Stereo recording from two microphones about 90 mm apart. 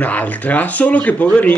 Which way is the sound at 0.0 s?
15° left (ahead or behind).